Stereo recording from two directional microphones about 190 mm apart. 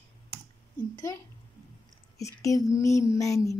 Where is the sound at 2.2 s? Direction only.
15° left (ahead or behind).